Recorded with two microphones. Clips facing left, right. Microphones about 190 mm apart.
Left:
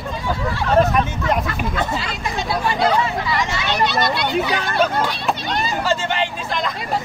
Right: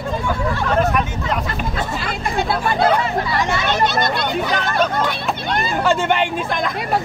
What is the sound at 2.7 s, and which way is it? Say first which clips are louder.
Speech: even; 50° right (ahead or behind).